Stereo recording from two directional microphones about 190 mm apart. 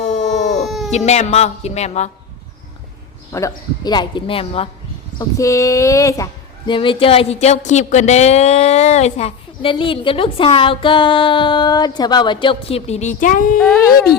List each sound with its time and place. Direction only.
0.0 s dog: 40° left (ahead or behind)
0.9 s a woman's voice: 35° left (ahead or behind)
3.3 s speech: 20° left (ahead or behind)
5.4 s female singing: 15° left (ahead or behind)
6.7 s speech: 25° left (ahead or behind); by 13.6 s 45° left (ahead or behind)